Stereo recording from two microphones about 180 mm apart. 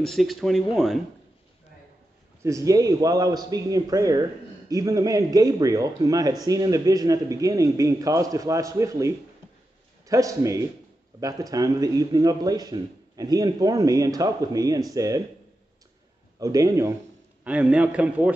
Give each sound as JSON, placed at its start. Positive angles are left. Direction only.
{"t": 0.0, "sound": "speech", "side_deg": 0}
{"t": 2.4, "sound": "a man's voice", "side_deg": -20}
{"t": 16.3, "sound": "a man's voice", "side_deg": -20}
{"t": 17.4, "sound": "speech", "side_deg": -10}